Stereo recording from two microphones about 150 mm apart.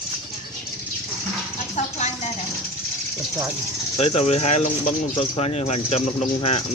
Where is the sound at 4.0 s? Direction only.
45° left (ahead or behind).